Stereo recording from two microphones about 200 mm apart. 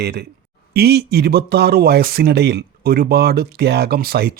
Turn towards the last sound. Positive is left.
turn(degrees=-50)  # may be behind; listen again after turning